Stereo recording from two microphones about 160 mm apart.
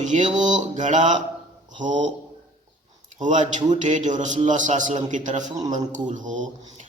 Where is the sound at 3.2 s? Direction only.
50° right (ahead or behind).